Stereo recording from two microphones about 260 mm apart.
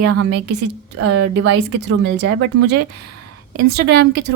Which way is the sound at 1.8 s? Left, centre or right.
Right.